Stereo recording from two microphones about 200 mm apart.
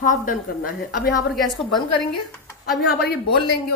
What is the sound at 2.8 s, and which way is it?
Speech, 50° left (ahead or behind).